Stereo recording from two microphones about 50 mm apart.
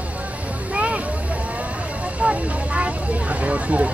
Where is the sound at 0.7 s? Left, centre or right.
Right.